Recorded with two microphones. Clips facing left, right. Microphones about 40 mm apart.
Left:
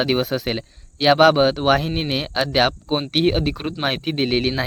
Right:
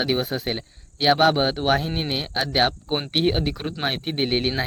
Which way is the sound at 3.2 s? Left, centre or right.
Left.